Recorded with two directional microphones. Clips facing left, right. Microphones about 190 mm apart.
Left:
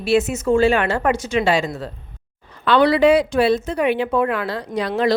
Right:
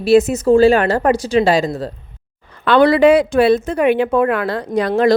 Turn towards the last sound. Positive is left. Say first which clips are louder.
# right 5 dB
turn(degrees=-50)  # may be behind; listen again after turning